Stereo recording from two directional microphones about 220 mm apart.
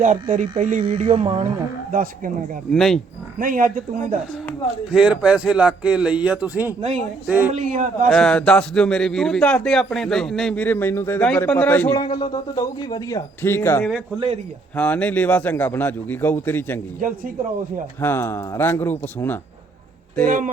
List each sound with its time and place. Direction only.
0.0 s speech: 35° right (ahead or behind)
0.6 s music: 30° right (ahead or behind)
1.9 s speech: 40° right (ahead or behind)
2.7 s a man's voice: centre (ahead or behind)
3.3 s speech: 40° right (ahead or behind)
4.4 s a man's voice: centre (ahead or behind)
7.5 s speech: 35° right (ahead or behind)
8.1 s a man's voice: 5° left (ahead or behind)
11.9 s a man's voice: 20° left (ahead or behind)
18.0 s a man's voice: 10° left (ahead or behind)
20.2 s speech: 40° right (ahead or behind)